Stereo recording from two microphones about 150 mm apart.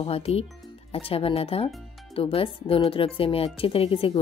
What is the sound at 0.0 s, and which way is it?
A woman's voice, 40° left (ahead or behind).